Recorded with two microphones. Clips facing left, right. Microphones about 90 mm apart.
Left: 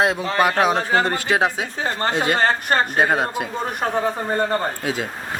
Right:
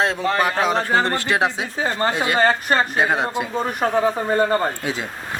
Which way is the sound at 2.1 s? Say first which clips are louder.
Left 1 dB; 20° left (ahead or behind).